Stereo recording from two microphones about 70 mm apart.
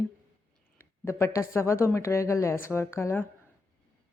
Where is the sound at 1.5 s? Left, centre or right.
Left.